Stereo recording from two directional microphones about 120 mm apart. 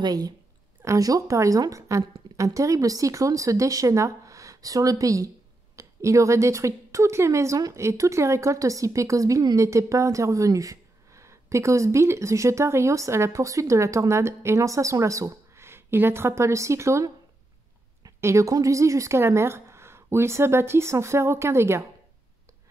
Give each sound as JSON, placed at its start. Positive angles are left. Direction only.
{"t": 0.0, "sound": "a woman's voice", "side_deg": -30}